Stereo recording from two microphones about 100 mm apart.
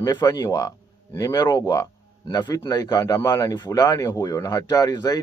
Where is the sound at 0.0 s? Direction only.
40° left (ahead or behind).